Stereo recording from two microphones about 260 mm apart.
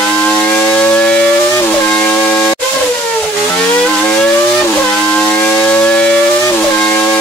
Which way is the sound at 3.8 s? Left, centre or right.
Centre.